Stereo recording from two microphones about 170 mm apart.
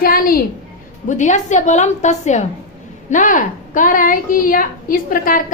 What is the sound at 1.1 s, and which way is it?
A woman's voice, 45° left (ahead or behind).